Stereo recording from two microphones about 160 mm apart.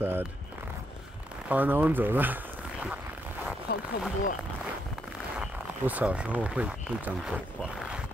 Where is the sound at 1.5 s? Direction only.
10° right (ahead or behind).